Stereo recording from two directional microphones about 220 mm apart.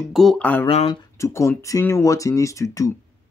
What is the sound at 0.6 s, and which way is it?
Speech, 25° left (ahead or behind).